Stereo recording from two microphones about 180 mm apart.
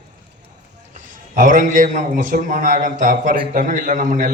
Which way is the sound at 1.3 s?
50° right (ahead or behind).